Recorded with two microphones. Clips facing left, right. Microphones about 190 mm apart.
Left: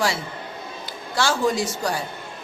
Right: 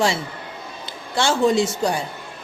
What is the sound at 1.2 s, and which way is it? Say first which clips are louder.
Speech: right 4 dB; 25° right (ahead or behind).